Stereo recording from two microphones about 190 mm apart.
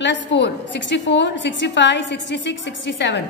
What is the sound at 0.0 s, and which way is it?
A woman's voice, 70° left (ahead or behind).